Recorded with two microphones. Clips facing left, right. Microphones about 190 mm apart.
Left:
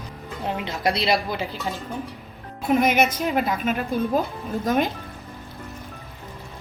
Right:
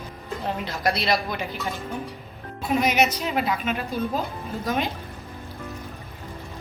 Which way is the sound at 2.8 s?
50° left (ahead or behind).